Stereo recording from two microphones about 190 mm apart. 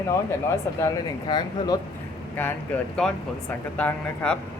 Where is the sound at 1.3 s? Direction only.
20° left (ahead or behind).